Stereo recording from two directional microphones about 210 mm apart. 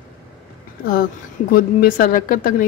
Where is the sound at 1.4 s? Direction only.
45° left (ahead or behind).